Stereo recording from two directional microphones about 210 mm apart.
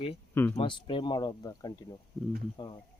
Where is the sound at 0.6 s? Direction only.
25° left (ahead or behind).